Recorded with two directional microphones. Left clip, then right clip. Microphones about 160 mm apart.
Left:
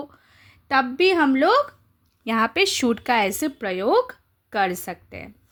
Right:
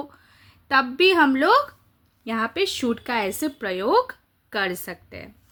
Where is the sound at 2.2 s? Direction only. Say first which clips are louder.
Left 4 dB; 45° left (ahead or behind).